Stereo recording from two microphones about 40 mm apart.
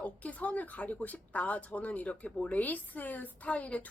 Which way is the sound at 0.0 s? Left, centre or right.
Left.